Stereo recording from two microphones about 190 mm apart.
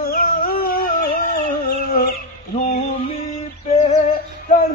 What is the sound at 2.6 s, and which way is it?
Male singing, 35° left (ahead or behind).